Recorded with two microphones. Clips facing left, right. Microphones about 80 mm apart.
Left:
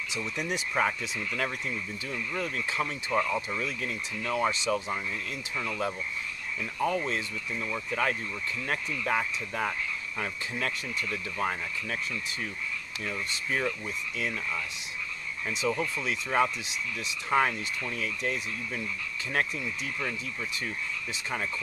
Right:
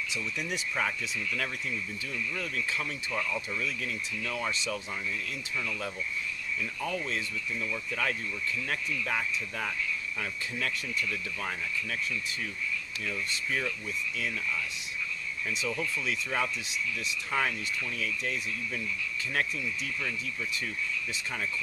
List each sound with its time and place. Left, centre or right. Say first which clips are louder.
0.4 s speech: left 5 dB; left
5.6 s speech: left 5 dB; left
13.0 s speech: left 2 dB; left
15.6 s speech: left 5 dB; left